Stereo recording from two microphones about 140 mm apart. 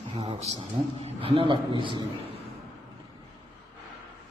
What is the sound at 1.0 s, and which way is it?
Speech, 45° right (ahead or behind).